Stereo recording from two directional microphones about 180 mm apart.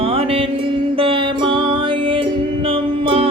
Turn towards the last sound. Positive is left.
turn(degrees=-30)  # may be behind; listen again after turning